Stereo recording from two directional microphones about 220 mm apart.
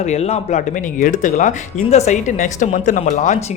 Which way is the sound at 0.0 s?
30° left (ahead or behind).